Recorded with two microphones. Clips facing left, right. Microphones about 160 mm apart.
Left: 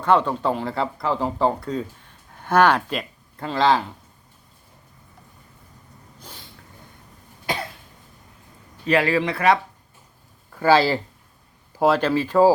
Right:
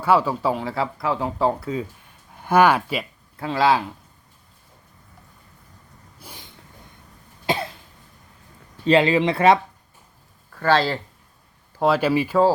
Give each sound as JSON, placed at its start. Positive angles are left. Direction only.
{"t": 0.0, "sound": "speech", "side_deg": -5}
{"t": 6.1, "sound": "a sound", "side_deg": -10}
{"t": 7.4, "sound": "cough", "side_deg": -25}
{"t": 8.9, "sound": "speech", "side_deg": -20}
{"t": 10.5, "sound": "speech", "side_deg": 10}
{"t": 11.8, "sound": "speech", "side_deg": -5}